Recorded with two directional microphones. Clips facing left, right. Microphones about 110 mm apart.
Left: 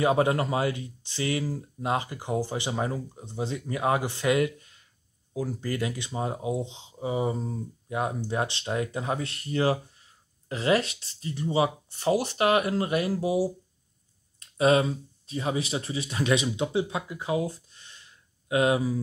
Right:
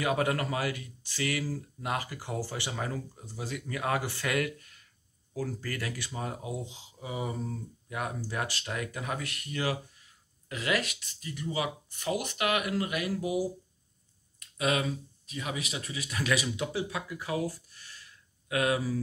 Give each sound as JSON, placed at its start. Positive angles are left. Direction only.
{"t": 0.0, "sound": "speech", "side_deg": 25}